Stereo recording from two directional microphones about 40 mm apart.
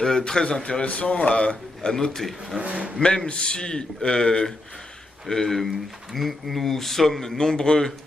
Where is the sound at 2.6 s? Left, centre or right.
Right.